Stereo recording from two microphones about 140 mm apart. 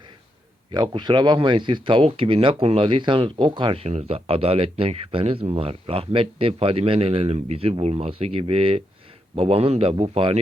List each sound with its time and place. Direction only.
0.7 s speech: 30° right (ahead or behind)